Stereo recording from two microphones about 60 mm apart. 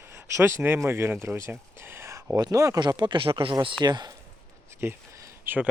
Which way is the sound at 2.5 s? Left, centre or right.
Right.